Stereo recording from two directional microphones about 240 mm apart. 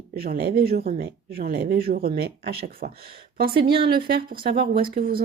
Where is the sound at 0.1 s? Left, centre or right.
Right.